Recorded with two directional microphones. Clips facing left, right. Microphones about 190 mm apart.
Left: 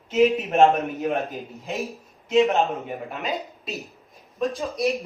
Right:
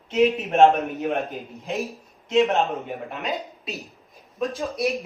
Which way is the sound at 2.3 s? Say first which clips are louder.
Left 1 dB; centre (ahead or behind).